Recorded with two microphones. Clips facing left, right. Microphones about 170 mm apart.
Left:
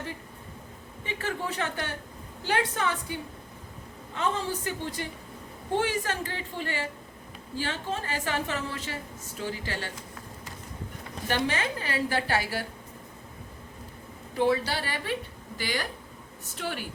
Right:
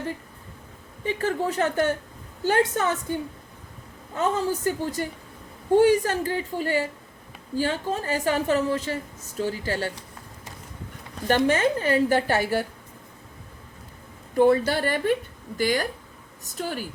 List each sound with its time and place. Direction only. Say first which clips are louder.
1.0 s a woman's voice: right 7 dB; 40° right (ahead or behind)
11.3 s a woman's voice: right 8 dB; 45° right (ahead or behind)
14.3 s a woman's voice: right 7 dB; 50° right (ahead or behind)